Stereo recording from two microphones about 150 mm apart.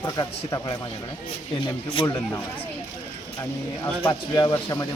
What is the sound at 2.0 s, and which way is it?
Speech, 35° left (ahead or behind).